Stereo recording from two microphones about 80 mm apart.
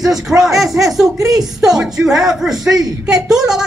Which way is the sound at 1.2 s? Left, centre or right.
Right.